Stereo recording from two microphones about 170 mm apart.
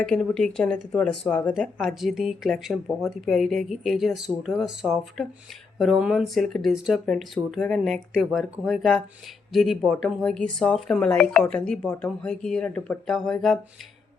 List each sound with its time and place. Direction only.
0.0 s speech: 5° left (ahead or behind)